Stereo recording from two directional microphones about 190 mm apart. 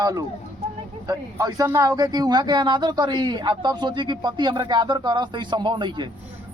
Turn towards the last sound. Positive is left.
turn(degrees=-25)  # may be behind; listen again after turning